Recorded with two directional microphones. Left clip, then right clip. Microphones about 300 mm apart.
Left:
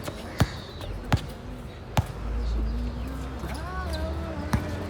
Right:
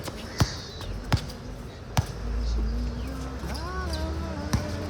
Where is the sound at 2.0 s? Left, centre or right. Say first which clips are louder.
Left 1 dB; centre.